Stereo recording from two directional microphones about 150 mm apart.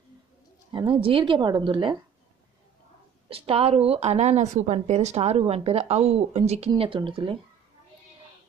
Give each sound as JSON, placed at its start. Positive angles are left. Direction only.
{"t": 0.7, "sound": "speech", "side_deg": -35}
{"t": 3.3, "sound": "a woman's voice", "side_deg": -40}
{"t": 6.7, "sound": "speech", "side_deg": -30}